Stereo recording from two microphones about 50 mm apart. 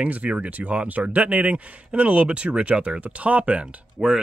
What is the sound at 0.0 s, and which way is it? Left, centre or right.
Speech, right.